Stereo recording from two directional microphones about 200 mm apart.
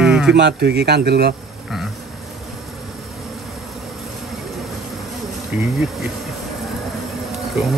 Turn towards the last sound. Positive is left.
turn(degrees=0)  # may be behind; listen again after turning